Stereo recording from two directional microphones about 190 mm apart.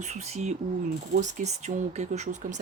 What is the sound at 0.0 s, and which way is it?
Speech, 35° right (ahead or behind).